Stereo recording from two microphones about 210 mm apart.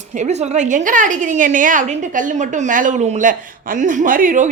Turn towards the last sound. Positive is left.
turn(degrees=-40)  # may be behind; listen again after turning